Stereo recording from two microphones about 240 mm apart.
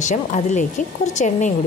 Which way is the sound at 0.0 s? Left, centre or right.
Left.